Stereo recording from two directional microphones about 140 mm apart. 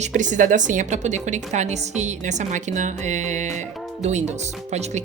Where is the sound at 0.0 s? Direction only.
60° right (ahead or behind).